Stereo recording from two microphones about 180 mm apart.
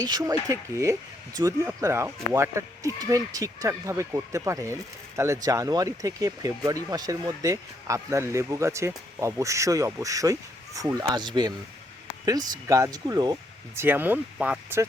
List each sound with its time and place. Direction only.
0.0 s speech: 20° right (ahead or behind)
13.8 s speech: 10° right (ahead or behind)